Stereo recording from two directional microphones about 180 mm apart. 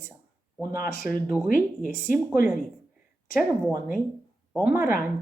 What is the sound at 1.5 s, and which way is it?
Speech, 50° left (ahead or behind).